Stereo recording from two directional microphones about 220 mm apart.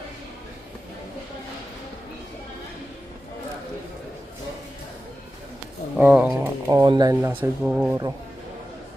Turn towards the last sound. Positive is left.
turn(degrees=-5)  # may be behind; listen again after turning